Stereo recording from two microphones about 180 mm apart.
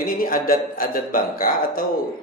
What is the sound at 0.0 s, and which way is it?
A man's voice, 50° left (ahead or behind).